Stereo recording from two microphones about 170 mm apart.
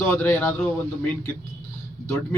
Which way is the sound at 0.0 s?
15° left (ahead or behind).